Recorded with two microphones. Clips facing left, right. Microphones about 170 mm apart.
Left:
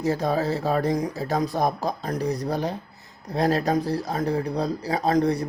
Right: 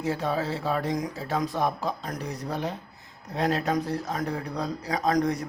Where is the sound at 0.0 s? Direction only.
40° left (ahead or behind).